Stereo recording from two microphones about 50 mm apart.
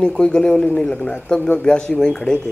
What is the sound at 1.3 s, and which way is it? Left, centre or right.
Speech, left.